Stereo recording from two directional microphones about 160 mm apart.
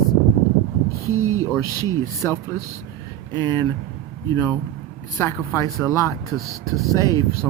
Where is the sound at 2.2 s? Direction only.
15° left (ahead or behind).